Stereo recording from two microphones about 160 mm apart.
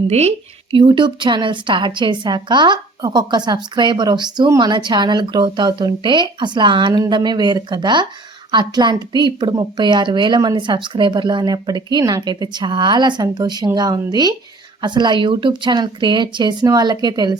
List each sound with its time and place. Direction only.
0.1 s a woman's voice: 40° right (ahead or behind); by 17.3 s 25° right (ahead or behind)